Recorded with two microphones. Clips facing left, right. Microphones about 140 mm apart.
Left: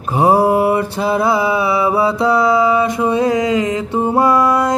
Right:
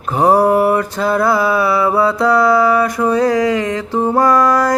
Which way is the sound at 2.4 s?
20° left (ahead or behind).